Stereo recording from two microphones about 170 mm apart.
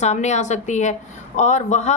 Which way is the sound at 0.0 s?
45° left (ahead or behind).